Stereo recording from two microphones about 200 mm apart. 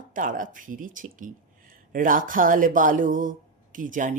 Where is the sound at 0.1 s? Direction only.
40° right (ahead or behind).